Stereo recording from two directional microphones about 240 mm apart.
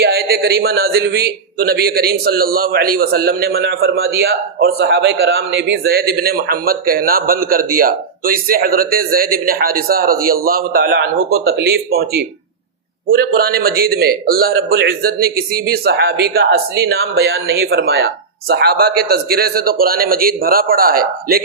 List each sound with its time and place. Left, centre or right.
0.0 s a man's voice: right